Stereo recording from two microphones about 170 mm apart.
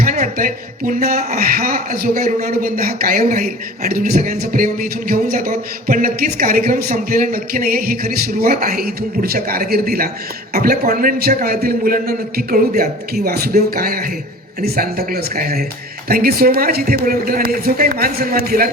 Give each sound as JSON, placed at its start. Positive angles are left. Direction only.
{"t": 0.0, "sound": "speech", "side_deg": -55}